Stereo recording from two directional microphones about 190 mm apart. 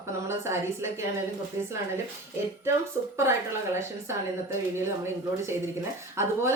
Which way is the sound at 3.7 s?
15° right (ahead or behind).